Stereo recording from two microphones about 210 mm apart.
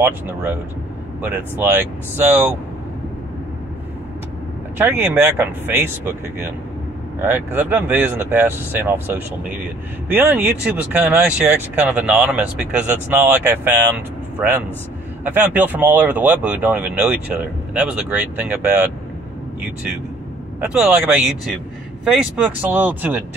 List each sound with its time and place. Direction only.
1.2 s speech: 10° right (ahead or behind)
4.7 s speech: 10° right (ahead or behind)
20.6 s speech: 5° right (ahead or behind)